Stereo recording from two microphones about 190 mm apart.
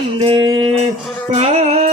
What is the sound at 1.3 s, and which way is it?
Music, 35° right (ahead or behind).